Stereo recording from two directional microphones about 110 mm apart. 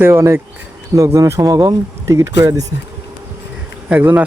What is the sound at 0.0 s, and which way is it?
Speech, 25° right (ahead or behind).